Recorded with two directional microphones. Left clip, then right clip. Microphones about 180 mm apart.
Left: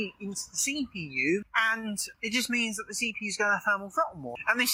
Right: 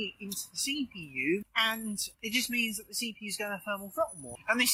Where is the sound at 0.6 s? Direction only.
10° right (ahead or behind).